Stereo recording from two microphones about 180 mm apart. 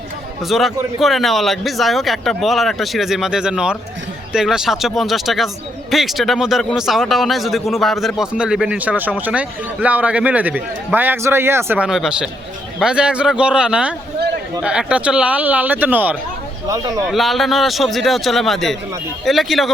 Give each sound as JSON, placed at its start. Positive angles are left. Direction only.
{"t": 0.4, "sound": "a man's voice", "side_deg": 0}
{"t": 17.1, "sound": "speech", "side_deg": 0}